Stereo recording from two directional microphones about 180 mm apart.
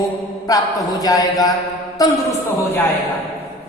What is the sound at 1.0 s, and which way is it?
A man's voice, 20° left (ahead or behind).